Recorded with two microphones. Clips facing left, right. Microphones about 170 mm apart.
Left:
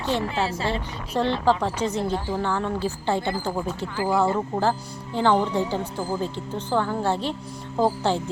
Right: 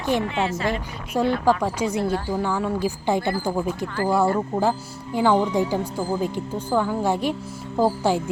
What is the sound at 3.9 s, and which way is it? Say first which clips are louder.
Speech: right 1 dB; 10° left (ahead or behind).